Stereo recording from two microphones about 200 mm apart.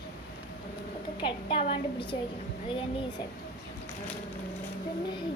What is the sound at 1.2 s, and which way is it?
Speech, 25° left (ahead or behind).